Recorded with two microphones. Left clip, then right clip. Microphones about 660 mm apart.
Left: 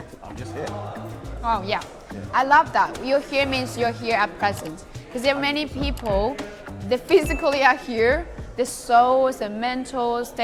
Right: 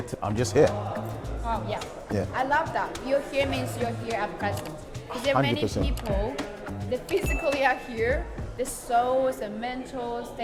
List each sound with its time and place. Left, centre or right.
1.5 s a woman's voice: left